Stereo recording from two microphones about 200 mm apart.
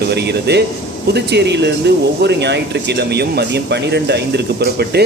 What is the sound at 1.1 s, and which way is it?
Speech, 55° right (ahead or behind).